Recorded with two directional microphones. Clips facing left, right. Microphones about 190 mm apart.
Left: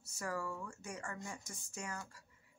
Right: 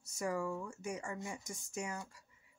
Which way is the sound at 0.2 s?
15° right (ahead or behind).